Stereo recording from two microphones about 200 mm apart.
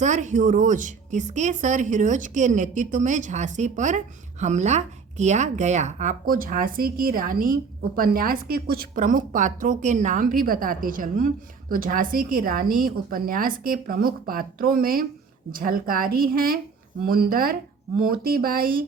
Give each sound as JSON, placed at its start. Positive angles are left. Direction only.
{"t": 0.0, "sound": "a woman's voice", "side_deg": -35}